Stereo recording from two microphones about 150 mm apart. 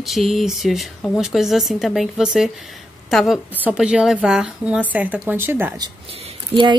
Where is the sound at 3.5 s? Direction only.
10° right (ahead or behind).